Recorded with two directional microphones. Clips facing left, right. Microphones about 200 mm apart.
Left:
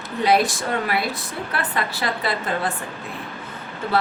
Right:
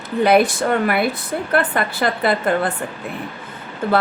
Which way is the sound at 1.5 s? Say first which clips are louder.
Right 7 dB; 55° right (ahead or behind).